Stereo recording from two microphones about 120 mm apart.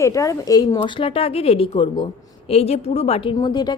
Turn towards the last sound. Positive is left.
turn(degrees=35)  # may be behind; listen again after turning